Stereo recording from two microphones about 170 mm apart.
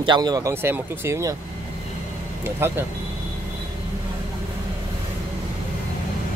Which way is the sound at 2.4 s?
15° right (ahead or behind).